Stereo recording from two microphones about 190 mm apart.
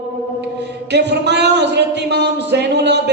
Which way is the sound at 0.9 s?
60° right (ahead or behind).